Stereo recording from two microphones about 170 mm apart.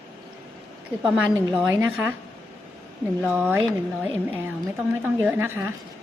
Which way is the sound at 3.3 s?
10° right (ahead or behind).